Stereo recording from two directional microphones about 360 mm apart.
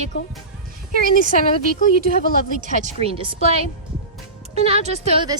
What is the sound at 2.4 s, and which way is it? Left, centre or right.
A woman's voice, right.